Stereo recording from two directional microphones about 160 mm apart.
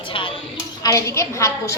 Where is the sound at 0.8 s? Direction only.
20° left (ahead or behind).